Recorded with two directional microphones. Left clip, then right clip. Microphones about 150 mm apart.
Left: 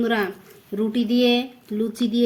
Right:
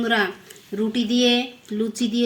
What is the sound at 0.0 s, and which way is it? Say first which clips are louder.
Speech: right 2 dB; 15° left (ahead or behind).